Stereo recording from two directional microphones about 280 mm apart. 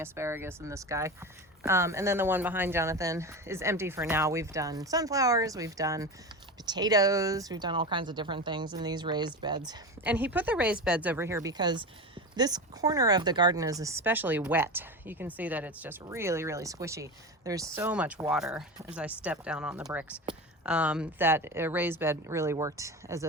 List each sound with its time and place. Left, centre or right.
0.0 s speech: centre